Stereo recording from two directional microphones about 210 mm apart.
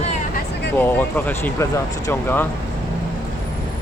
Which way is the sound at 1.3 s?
10° left (ahead or behind).